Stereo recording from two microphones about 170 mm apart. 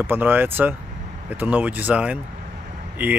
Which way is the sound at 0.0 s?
10° right (ahead or behind).